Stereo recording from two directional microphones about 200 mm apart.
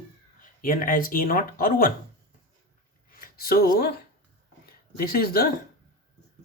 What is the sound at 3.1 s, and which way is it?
Speech, 50° left (ahead or behind).